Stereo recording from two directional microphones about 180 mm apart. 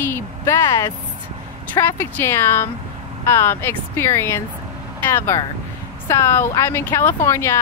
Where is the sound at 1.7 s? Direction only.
15° left (ahead or behind).